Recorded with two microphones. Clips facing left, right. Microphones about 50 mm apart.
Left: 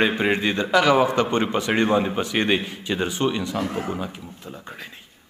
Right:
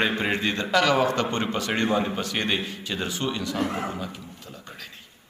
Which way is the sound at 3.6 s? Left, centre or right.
Right.